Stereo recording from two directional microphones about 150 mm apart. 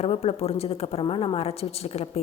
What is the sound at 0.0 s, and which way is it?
A woman's voice, 40° left (ahead or behind).